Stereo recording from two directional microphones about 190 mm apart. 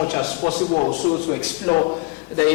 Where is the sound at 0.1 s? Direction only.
25° left (ahead or behind).